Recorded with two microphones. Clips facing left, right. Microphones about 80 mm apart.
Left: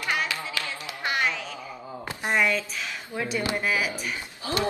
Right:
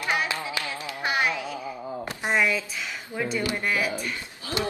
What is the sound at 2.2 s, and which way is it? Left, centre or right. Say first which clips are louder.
Speech: even; centre.